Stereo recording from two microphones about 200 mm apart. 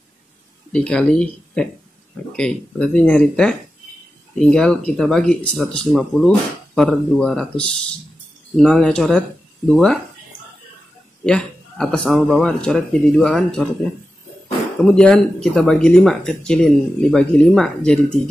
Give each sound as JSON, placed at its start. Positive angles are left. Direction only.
{"t": 0.7, "sound": "speech", "side_deg": 5}
{"t": 11.2, "sound": "speech", "side_deg": 5}
{"t": 14.8, "sound": "speech", "side_deg": 5}